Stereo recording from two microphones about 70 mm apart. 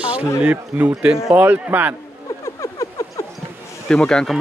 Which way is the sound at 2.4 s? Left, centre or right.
Left.